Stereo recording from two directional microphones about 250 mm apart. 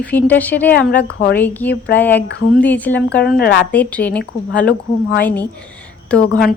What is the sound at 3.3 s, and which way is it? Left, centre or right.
Speech, left.